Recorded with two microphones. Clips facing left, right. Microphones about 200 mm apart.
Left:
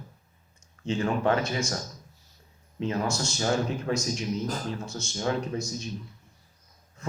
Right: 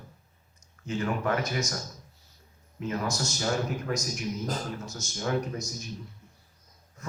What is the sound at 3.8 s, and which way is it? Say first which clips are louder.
A man's voice: left 3 dB; 25° left (ahead or behind).